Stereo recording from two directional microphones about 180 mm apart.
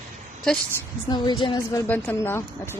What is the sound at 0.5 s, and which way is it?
Speech, 5° left (ahead or behind).